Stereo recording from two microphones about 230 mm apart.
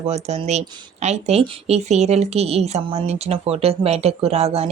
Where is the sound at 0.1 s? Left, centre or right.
Right.